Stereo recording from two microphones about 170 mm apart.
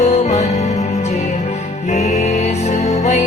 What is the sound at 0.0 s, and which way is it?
Music, 45° left (ahead or behind).